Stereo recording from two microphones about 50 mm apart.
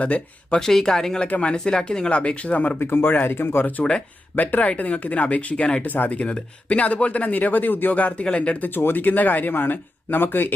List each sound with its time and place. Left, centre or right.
0.0 s speech: left
0.6 s speech: centre
1.3 s speech: left
2.7 s speech: left
4.4 s speech: left
5.8 s speech: left
8.2 s speech: left
8.6 s speech: left